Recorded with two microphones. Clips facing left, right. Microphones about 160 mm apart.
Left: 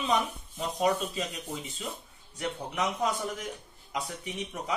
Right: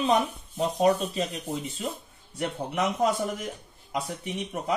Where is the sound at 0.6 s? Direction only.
35° right (ahead or behind).